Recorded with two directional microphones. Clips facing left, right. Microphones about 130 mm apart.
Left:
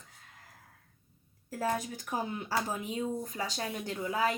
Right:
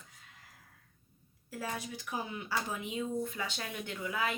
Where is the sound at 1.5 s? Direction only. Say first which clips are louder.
Left 7 dB; 45° left (ahead or behind).